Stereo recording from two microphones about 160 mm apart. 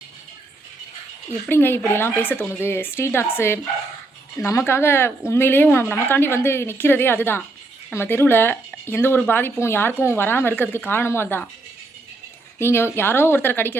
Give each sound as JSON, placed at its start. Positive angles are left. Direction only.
{"t": 1.5, "sound": "speech", "side_deg": 15}
{"t": 12.5, "sound": "speech", "side_deg": 15}